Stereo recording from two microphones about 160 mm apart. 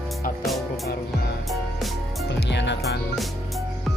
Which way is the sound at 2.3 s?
90° left.